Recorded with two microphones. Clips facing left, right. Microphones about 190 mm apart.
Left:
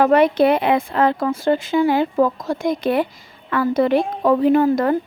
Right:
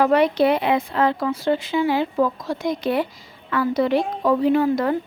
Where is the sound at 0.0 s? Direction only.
50° left (ahead or behind).